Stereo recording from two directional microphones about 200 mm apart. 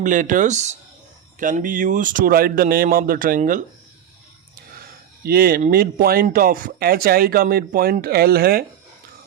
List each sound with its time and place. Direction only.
0.0 s speech: 40° right (ahead or behind)
5.2 s speech: 50° right (ahead or behind)